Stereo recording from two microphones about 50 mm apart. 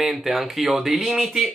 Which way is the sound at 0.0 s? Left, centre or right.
Centre.